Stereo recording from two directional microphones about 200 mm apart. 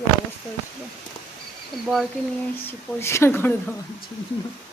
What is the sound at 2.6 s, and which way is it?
Speech, 15° left (ahead or behind).